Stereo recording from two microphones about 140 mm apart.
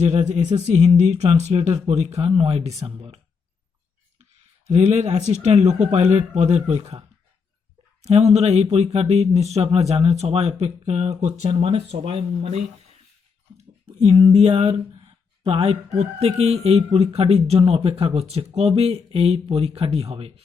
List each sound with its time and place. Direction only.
0.0 s speech: 55° right (ahead or behind)
4.7 s speech: 50° right (ahead or behind)
8.0 s speech: 50° right (ahead or behind)